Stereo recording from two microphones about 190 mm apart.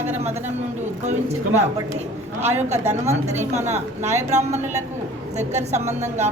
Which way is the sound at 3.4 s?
35° right (ahead or behind).